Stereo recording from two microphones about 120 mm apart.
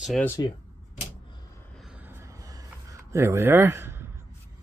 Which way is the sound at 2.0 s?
20° right (ahead or behind).